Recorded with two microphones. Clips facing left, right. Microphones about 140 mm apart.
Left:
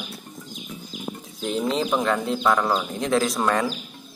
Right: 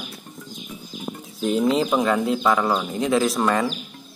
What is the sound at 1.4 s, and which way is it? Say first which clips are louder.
Speech: right 4 dB; 5° right (ahead or behind).